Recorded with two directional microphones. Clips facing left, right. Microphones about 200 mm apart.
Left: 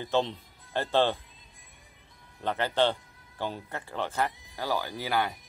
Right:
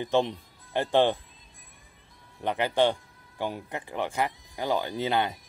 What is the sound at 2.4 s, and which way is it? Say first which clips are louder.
Speech: right 2 dB; 15° right (ahead or behind).